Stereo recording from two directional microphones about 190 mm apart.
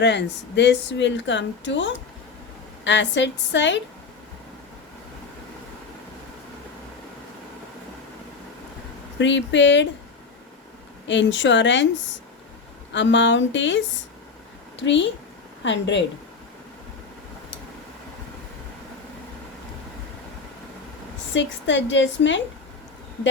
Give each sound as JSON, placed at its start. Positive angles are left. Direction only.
{"t": 0.0, "sound": "speech", "side_deg": 65}
{"t": 9.1, "sound": "speech", "side_deg": 70}
{"t": 11.1, "sound": "speech", "side_deg": 75}
{"t": 12.9, "sound": "a woman's voice", "side_deg": 75}
{"t": 21.3, "sound": "speech", "side_deg": 70}